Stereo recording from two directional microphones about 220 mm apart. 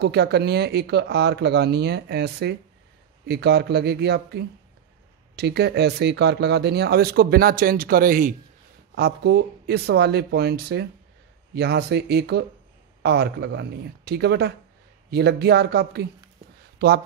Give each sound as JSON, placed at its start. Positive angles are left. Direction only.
{"t": 0.0, "sound": "speech", "side_deg": -50}